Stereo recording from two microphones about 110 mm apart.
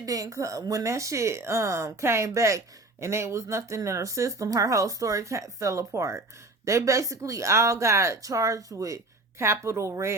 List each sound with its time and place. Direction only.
0.0 s a woman's voice: 30° right (ahead or behind)